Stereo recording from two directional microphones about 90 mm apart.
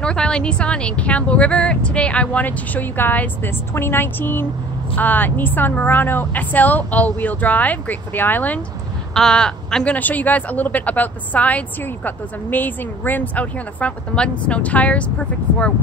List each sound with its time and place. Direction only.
0.0 s a woman's voice: 10° left (ahead or behind)
9.1 s a woman's voice: 5° left (ahead or behind)
9.9 s a woman's voice: 20° left (ahead or behind)